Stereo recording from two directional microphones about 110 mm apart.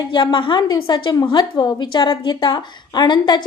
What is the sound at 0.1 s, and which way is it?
A woman's voice, 45° left (ahead or behind).